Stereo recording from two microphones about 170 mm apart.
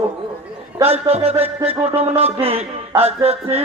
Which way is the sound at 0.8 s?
35° right (ahead or behind).